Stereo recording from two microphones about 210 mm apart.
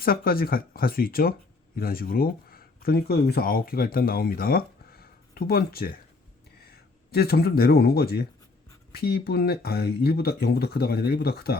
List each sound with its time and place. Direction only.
0.0 s speech: 45° left (ahead or behind)
7.1 s speech: 50° left (ahead or behind)